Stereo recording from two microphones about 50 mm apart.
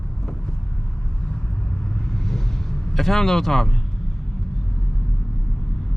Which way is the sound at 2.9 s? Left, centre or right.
Centre.